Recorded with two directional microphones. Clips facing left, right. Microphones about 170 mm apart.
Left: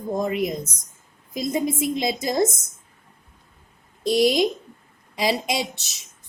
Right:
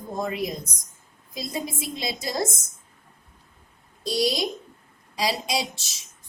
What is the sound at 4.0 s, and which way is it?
A woman's voice, 20° left (ahead or behind).